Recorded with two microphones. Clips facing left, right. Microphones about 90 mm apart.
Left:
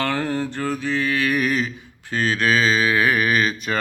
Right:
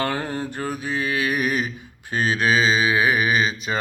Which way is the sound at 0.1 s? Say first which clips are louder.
Left 3 dB; 15° right (ahead or behind).